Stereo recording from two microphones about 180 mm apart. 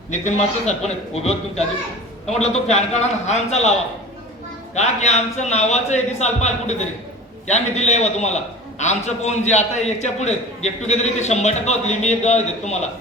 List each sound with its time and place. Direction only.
0.1 s a man's voice: 40° left (ahead or behind)